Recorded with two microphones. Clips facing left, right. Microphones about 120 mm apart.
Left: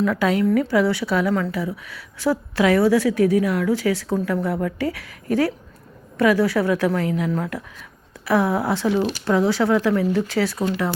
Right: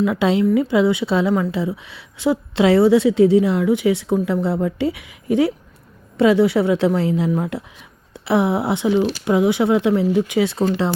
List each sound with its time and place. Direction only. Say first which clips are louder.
0.0 s a woman's voice: right 2 dB; 20° right (ahead or behind)